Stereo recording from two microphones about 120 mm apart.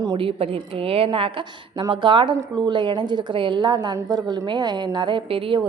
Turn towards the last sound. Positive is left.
turn(degrees=-45)  # may be behind; listen again after turning